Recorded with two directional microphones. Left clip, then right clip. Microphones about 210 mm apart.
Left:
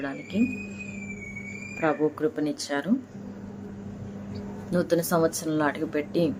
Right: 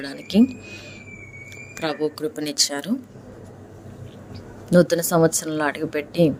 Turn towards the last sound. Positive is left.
turn(degrees=-35)  # may be behind; listen again after turning